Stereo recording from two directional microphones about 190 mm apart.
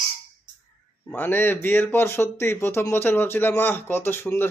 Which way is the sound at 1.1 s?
10° left (ahead or behind).